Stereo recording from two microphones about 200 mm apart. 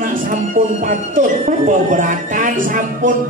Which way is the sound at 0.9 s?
40° right (ahead or behind).